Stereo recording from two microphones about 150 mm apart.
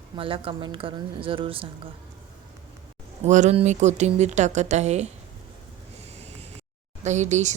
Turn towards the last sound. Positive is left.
turn(degrees=-50)  # may be behind; listen again after turning